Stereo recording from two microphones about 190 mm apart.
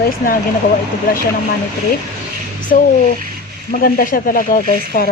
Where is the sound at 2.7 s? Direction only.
50° left (ahead or behind).